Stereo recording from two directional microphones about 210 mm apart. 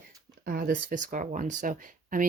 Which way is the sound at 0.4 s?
45° right (ahead or behind).